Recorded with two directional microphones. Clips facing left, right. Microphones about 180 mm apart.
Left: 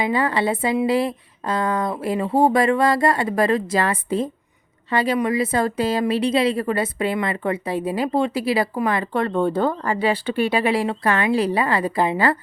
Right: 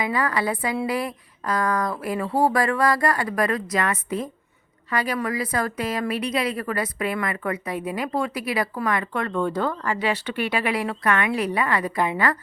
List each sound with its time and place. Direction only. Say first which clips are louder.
0.0 s a woman's voice: left 4 dB; 25° left (ahead or behind)